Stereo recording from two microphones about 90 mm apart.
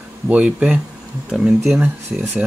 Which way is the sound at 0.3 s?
15° right (ahead or behind).